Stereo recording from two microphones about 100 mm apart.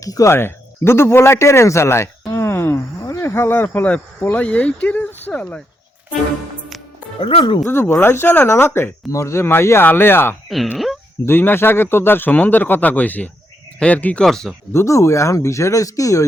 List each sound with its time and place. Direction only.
0.0 s speech: 35° left (ahead or behind); by 5.6 s 10° left (ahead or behind)
7.2 s speech: 65° left (ahead or behind)
7.6 s speech: 20° left (ahead or behind); by 14.5 s 5° left (ahead or behind)
14.7 s speech: 30° left (ahead or behind)